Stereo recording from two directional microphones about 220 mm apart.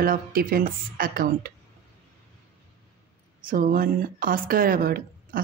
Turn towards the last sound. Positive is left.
turn(degrees=-40)  # may be behind; listen again after turning